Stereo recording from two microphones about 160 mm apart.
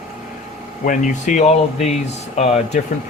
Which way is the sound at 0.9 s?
50° left (ahead or behind).